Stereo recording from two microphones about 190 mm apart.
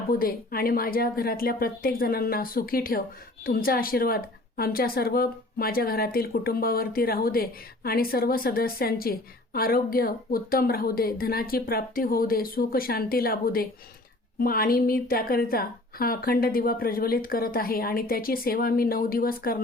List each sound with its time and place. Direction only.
0.1 s a woman's voice: 50° left (ahead or behind)